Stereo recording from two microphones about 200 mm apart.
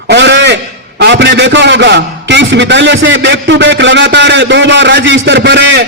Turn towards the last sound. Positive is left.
turn(degrees=-60)  # may be behind; listen again after turning